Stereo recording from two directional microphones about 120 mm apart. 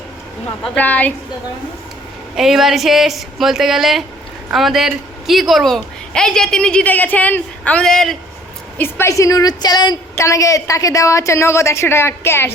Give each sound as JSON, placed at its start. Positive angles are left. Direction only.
{"t": 0.8, "sound": "a woman's voice", "side_deg": 15}
{"t": 2.3, "sound": "a woman's voice", "side_deg": -5}
{"t": 8.8, "sound": "a woman's voice", "side_deg": 20}